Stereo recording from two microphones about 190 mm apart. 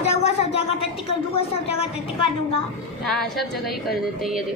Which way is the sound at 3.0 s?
Centre (ahead or behind).